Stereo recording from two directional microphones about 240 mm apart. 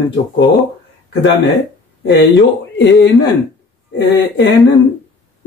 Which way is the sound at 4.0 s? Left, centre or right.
Left.